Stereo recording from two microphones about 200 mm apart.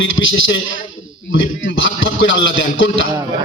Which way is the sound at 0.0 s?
75° left (ahead or behind).